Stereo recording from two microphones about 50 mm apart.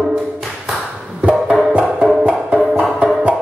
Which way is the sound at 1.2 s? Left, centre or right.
Right.